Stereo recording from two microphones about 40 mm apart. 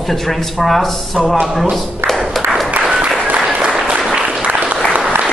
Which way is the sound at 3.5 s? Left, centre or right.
Right.